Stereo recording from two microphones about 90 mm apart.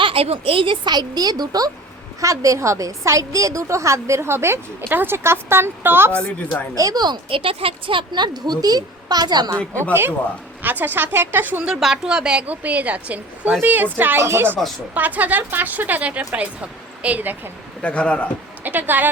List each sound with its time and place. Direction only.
0.0 s speech: 90° right
0.9 s a woman's voice: 50° right (ahead or behind); by 6.1 s 25° right (ahead or behind)
6.1 s speech: 15° left (ahead or behind)
6.7 s a woman's voice: 40° right (ahead or behind)
7.0 s speech: 55° right (ahead or behind)
7.3 s speech: 90° right; by 9.6 s 50° right (ahead or behind)
10.6 s speech: 20° right (ahead or behind)
11.8 s a woman's voice: 5° right (ahead or behind)
17.8 s speech: 15° left (ahead or behind)
18.6 s speech: 20° right (ahead or behind)